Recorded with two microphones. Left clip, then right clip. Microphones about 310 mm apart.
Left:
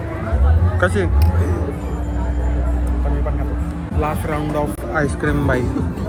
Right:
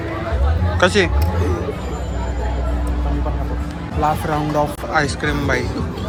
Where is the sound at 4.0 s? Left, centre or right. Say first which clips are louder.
Right 4 dB; centre.